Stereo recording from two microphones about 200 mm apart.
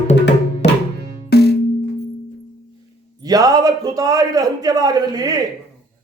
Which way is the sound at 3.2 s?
20° right (ahead or behind).